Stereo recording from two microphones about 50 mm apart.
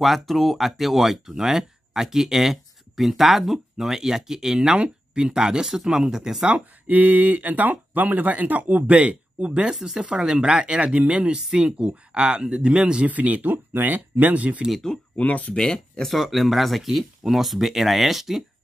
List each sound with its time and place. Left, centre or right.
0.0 s speech: centre
6.9 s speech: right
9.7 s speech: centre
13.1 s speech: right
14.7 s speech: centre
15.1 s speech: left
15.5 s speech: centre
16.1 s speech: centre